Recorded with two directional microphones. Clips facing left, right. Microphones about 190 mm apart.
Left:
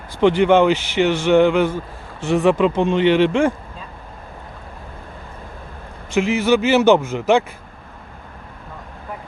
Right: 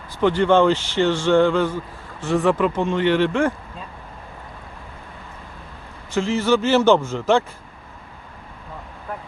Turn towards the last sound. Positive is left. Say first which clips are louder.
# left 2 dB
turn(degrees=15)  # may be behind; listen again after turning